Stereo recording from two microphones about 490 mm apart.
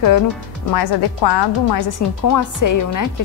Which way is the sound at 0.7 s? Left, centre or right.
Left.